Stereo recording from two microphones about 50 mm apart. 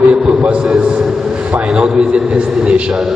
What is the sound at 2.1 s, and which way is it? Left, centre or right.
Speech, right.